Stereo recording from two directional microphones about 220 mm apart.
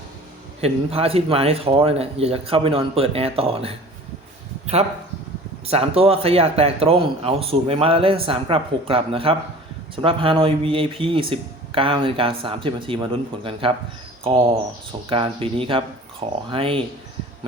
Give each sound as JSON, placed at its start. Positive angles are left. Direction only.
{"t": 0.6, "sound": "speech", "side_deg": -25}